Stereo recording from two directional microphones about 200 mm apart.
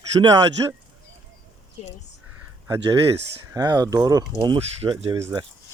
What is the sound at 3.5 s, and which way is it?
Speech, 20° right (ahead or behind).